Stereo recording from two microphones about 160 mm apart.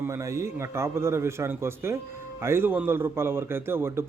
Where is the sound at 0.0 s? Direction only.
20° right (ahead or behind).